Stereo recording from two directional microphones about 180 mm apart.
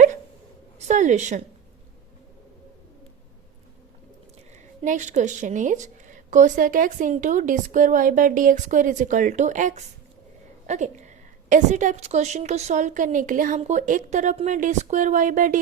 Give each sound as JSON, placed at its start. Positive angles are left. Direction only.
{"t": 0.9, "sound": "a woman's voice", "side_deg": -40}
{"t": 4.8, "sound": "a woman's voice", "side_deg": -40}